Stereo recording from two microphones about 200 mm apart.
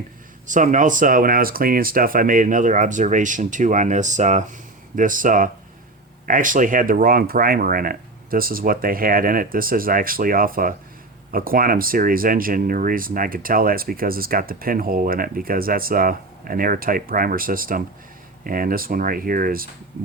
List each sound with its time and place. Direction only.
0.4 s speech: 40° right (ahead or behind)